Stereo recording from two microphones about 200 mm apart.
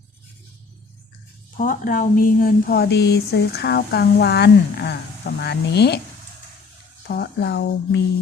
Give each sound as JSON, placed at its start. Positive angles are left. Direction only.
{"t": 1.5, "sound": "a woman's voice", "side_deg": 40}
{"t": 7.1, "sound": "a woman's voice", "side_deg": 55}